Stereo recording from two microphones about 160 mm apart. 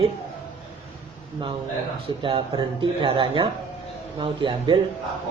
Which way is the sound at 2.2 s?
30° right (ahead or behind).